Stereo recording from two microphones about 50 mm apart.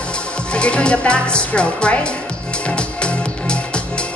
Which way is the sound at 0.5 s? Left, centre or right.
Left.